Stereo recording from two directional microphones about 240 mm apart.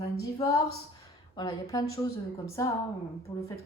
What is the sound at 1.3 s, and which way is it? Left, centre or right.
Speech, centre.